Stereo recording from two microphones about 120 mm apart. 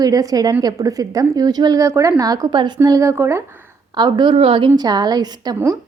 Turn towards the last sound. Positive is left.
turn(degrees=-35)  # may be behind; listen again after turning